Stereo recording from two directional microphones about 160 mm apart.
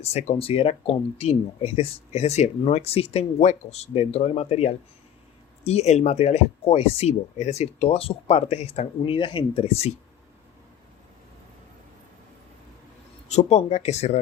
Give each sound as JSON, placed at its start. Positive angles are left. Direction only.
{"t": 0.0, "sound": "speech", "side_deg": 40}
{"t": 13.2, "sound": "speech", "side_deg": 45}